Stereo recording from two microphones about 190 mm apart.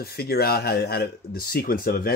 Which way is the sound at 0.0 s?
55° left (ahead or behind).